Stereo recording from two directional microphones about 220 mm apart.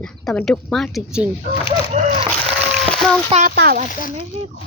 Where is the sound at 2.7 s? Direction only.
Centre (ahead or behind).